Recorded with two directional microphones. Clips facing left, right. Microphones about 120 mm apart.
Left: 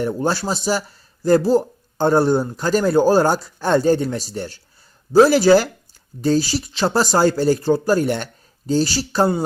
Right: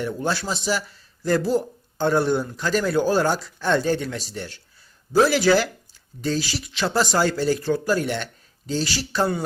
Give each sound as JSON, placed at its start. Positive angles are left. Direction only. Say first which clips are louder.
{"t": 0.0, "sound": "speech", "louder": "left 5 dB", "side_deg": 40}